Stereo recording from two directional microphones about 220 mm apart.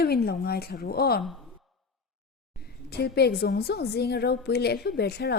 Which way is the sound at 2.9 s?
45° left (ahead or behind).